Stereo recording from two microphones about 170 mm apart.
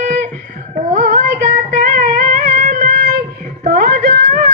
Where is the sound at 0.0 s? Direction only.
45° right (ahead or behind).